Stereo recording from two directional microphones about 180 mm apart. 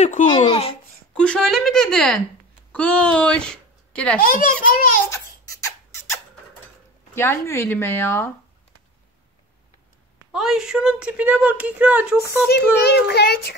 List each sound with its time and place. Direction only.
0.0 s a child's voice: 45° left (ahead or behind)
0.5 s a child's voice: 30° left (ahead or behind)
1.1 s a woman's voice: 5° left (ahead or behind)
4.2 s a child's voice: 55° left (ahead or behind)
5.1 s a sound: 15° left (ahead or behind)
7.2 s speech: 15° left (ahead or behind)
10.3 s a woman's voice: centre (ahead or behind)
12.4 s a child's voice: 70° left (ahead or behind)